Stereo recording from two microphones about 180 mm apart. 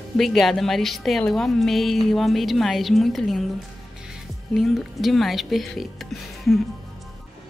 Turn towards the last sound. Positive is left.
turn(degrees=0)  # may be behind; listen again after turning